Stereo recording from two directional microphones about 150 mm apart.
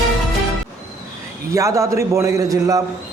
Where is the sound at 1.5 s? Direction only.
20° right (ahead or behind).